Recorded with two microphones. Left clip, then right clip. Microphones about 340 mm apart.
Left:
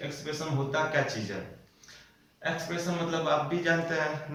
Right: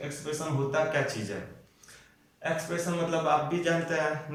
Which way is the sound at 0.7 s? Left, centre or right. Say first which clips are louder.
Even; centre.